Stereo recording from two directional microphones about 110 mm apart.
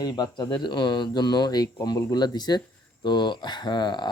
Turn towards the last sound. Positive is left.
turn(degrees=40)  # may be behind; listen again after turning